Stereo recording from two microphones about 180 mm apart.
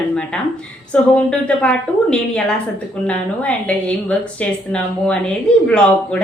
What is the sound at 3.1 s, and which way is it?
A woman's voice, 5° left (ahead or behind).